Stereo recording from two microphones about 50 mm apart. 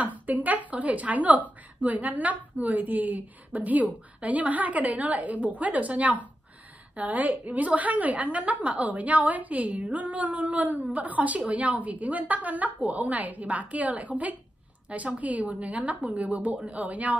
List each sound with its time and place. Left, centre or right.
0.0 s a woman's voice: right